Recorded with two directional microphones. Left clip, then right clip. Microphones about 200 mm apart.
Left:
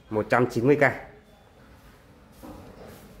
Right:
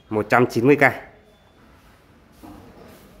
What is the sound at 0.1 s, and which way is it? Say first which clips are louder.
Speech: right 5 dB; 20° right (ahead or behind).